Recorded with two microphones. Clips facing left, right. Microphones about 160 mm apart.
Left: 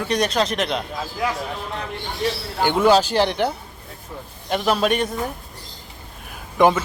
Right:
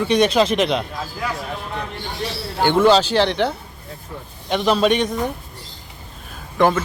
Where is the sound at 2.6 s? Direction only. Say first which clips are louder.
Right 2 dB; 10° left (ahead or behind).